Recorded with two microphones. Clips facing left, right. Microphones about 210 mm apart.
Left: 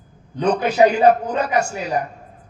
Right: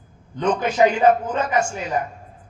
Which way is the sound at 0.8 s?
35° left (ahead or behind).